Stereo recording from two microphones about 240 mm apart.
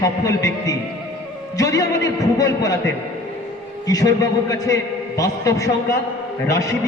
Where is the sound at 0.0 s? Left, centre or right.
Centre.